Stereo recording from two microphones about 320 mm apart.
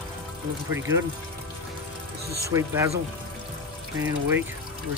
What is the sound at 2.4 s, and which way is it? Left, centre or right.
Speech, centre.